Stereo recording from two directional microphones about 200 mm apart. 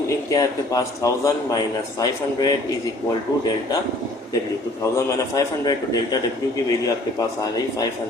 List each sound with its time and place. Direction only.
0.3 s a man's voice: 15° left (ahead or behind)
5.3 s a man's voice: 20° left (ahead or behind)